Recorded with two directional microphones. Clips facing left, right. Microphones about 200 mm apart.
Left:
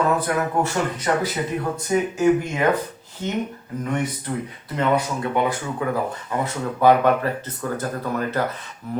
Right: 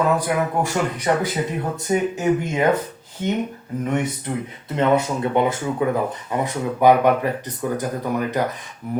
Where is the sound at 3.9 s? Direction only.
20° right (ahead or behind).